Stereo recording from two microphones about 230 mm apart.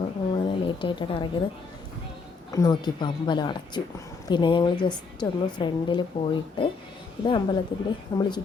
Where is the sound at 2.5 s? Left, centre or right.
Centre.